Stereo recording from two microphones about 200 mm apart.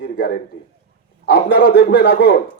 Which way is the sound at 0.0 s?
55° left (ahead or behind).